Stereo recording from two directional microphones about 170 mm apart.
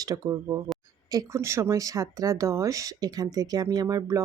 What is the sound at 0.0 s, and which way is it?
Speech, 20° right (ahead or behind).